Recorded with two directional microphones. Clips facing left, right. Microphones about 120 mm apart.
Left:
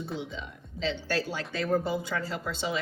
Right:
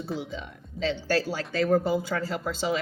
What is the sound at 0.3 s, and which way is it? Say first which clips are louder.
Speech: right 3 dB; 45° right (ahead or behind).